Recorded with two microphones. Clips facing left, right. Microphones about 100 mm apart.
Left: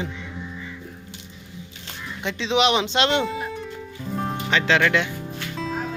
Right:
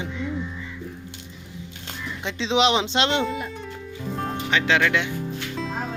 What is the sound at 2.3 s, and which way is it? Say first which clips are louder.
Speech: even; 30° right (ahead or behind).